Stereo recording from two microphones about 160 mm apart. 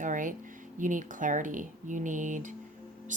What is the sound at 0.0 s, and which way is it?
Speech, 55° right (ahead or behind).